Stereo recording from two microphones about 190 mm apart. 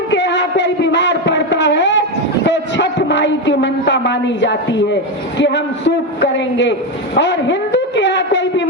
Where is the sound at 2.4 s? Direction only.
70° left (ahead or behind).